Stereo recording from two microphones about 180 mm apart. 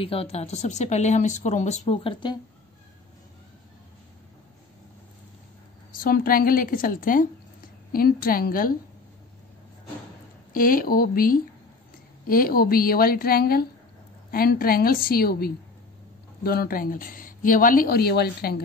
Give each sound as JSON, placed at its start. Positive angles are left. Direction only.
{"t": 0.0, "sound": "speech", "side_deg": 30}
{"t": 5.9, "sound": "speech", "side_deg": 55}
{"t": 10.5, "sound": "a woman's voice", "side_deg": 50}